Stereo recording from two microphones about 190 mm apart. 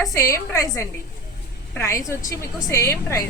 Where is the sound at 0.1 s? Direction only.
15° left (ahead or behind).